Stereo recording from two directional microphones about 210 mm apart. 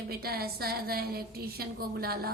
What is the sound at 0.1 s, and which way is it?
A woman's voice, 45° right (ahead or behind).